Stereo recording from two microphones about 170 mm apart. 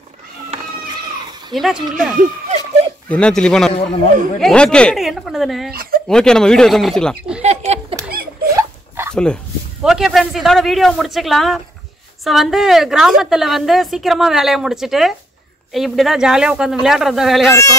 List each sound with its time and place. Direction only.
1.5 s speech: centre (ahead or behind)
5.7 s speech: 60° right (ahead or behind)
6.0 s speech: 5° left (ahead or behind)
7.4 s a sound: 40° right (ahead or behind)
8.5 s a sound: 15° right (ahead or behind)
9.1 s speech: 5° left (ahead or behind)
17.5 s speech: 15° left (ahead or behind)